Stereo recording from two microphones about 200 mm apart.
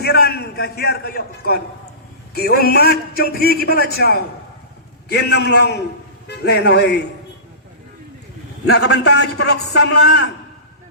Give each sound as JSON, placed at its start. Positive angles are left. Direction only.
{"t": 0.0, "sound": "a man's voice", "side_deg": 55}
{"t": 8.6, "sound": "a man's voice", "side_deg": 55}